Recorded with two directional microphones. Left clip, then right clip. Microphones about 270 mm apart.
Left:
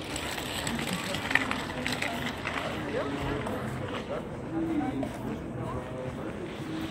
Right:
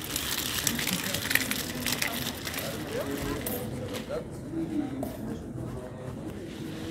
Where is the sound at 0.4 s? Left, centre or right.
Right.